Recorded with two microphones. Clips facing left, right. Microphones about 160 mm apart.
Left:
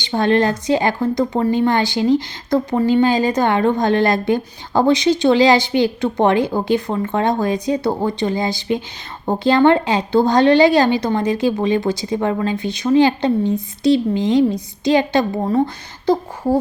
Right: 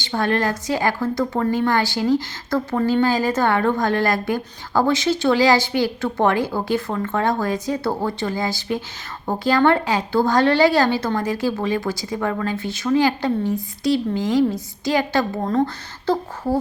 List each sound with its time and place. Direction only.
0.0 s a woman's voice: 20° left (ahead or behind)